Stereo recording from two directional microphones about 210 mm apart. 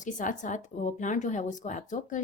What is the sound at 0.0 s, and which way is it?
Speech, 40° left (ahead or behind).